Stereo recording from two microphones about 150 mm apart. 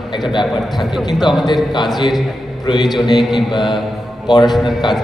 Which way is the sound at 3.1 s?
Centre (ahead or behind).